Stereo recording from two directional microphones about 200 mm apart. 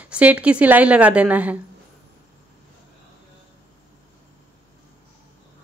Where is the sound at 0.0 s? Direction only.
5° right (ahead or behind).